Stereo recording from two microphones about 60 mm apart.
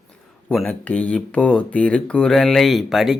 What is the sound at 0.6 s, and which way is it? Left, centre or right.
Speech, left.